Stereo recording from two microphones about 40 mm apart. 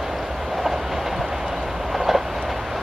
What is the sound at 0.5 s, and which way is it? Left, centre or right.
Train, centre.